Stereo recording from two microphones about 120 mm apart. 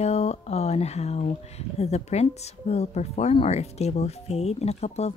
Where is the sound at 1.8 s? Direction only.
65° left (ahead or behind).